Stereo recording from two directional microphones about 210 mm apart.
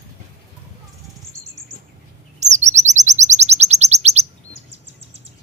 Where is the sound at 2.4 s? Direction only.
35° right (ahead or behind).